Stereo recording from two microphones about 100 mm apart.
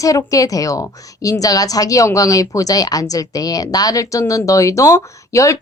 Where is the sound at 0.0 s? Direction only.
35° left (ahead or behind).